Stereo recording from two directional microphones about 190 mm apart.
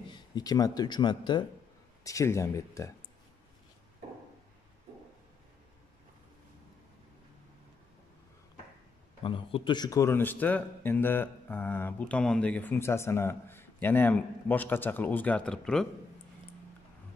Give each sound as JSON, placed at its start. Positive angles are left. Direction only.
{"t": 0.1, "sound": "speech", "side_deg": 20}
{"t": 9.2, "sound": "speech", "side_deg": 25}